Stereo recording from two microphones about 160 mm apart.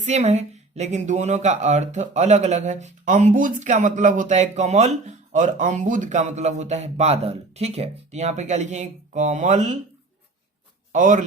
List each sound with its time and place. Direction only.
0.0 s a woman's voice: 45° right (ahead or behind)
10.9 s a woman's voice: 50° right (ahead or behind)